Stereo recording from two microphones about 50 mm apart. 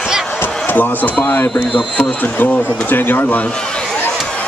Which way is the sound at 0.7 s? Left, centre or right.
Left.